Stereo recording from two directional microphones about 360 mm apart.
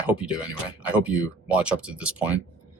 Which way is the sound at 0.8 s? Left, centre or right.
Centre.